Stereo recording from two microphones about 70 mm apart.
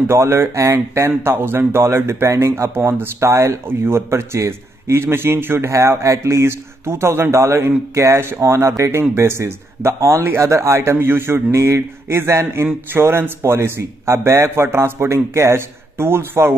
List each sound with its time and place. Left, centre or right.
0.0 s speech: right
5.7 s speech: right